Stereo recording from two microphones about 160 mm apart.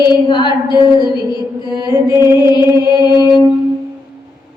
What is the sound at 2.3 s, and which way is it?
Music, 25° left (ahead or behind).